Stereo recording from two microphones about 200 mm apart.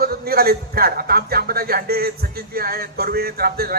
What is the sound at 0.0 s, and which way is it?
A man's voice, 50° right (ahead or behind).